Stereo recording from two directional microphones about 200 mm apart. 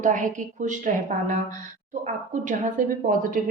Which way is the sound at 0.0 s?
40° right (ahead or behind).